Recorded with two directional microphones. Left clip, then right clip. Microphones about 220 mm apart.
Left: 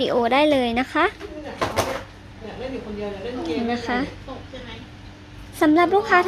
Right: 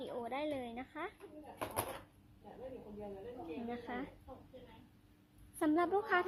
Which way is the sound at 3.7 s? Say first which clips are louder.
Left 19 dB; 5° left (ahead or behind).